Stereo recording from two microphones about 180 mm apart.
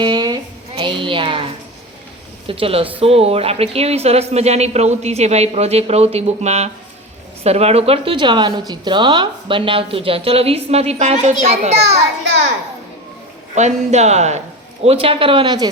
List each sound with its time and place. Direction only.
0.0 s a sound: 25° right (ahead or behind)
0.8 s speech: 30° right (ahead or behind)
2.5 s a woman's voice: 30° right (ahead or behind)
12.2 s a child's voice: 75° right (ahead or behind)
13.6 s a woman's voice: 40° right (ahead or behind); by 15.7 s 25° right (ahead or behind)